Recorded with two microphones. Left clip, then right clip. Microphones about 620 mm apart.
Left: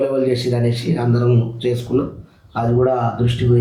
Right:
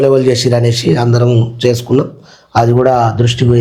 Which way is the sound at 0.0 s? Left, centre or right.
Right.